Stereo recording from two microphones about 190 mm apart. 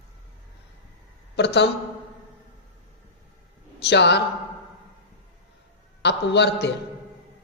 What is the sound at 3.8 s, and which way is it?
Speech, 65° left (ahead or behind).